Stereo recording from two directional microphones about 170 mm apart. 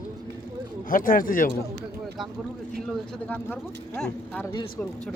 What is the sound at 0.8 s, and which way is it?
Speech, 55° left (ahead or behind).